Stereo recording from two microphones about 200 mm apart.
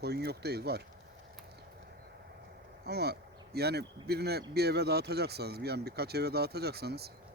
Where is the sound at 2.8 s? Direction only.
55° right (ahead or behind).